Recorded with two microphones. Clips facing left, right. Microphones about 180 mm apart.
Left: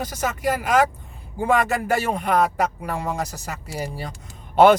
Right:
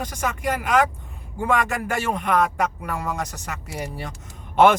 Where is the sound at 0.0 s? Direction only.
35° left (ahead or behind).